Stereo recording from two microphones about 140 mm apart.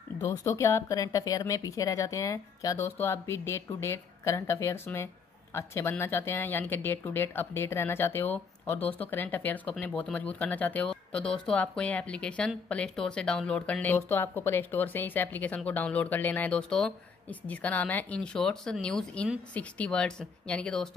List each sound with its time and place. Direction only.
0.2 s a woman's voice: 20° left (ahead or behind); by 20.9 s 5° left (ahead or behind)